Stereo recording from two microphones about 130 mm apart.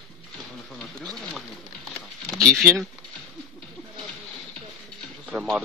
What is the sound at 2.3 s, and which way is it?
Speech, 5° left (ahead or behind).